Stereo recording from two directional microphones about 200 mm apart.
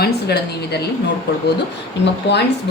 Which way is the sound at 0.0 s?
55° left (ahead or behind).